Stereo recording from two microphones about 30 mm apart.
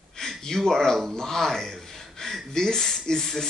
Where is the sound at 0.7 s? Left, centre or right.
Centre.